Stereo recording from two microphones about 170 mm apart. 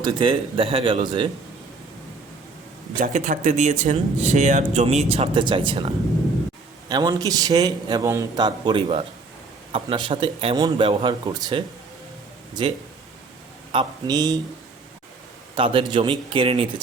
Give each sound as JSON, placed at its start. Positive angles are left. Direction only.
{"t": 0.0, "sound": "speech", "side_deg": -30}
{"t": 3.0, "sound": "a man's voice", "side_deg": -50}
{"t": 13.7, "sound": "a man's voice", "side_deg": -25}
{"t": 15.5, "sound": "a man's voice", "side_deg": -30}